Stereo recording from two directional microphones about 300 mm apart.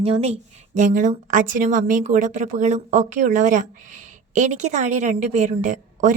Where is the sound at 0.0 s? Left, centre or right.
Centre.